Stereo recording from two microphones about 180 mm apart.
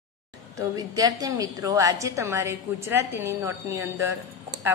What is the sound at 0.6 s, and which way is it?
A woman's voice, 20° right (ahead or behind).